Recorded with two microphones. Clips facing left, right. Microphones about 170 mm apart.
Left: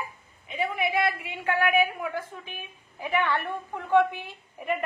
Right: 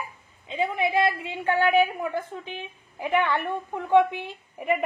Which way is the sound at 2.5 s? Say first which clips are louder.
Right 5 dB; 20° right (ahead or behind).